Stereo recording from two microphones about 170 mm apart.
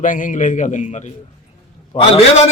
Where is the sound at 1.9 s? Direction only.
35° left (ahead or behind).